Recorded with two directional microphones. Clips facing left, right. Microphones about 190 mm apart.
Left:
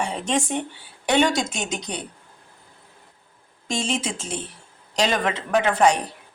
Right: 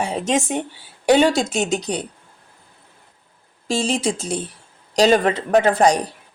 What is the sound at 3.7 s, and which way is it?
Speech, 35° right (ahead or behind).